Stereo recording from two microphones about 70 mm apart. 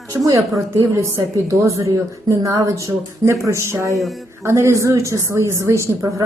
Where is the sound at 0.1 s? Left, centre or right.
Right.